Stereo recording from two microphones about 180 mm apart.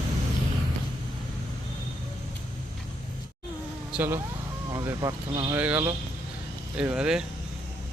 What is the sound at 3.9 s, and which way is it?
Speech, 10° right (ahead or behind).